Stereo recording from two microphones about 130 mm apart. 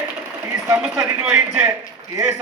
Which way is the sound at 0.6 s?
20° right (ahead or behind).